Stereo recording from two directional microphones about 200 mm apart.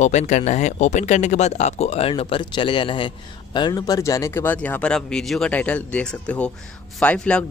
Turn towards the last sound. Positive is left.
turn(degrees=5)  # may be behind; listen again after turning